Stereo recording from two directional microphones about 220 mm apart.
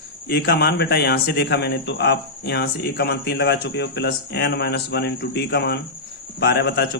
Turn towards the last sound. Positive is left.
turn(degrees=45)  # may be behind; listen again after turning